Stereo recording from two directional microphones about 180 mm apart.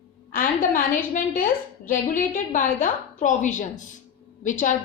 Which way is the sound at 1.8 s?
45° left (ahead or behind).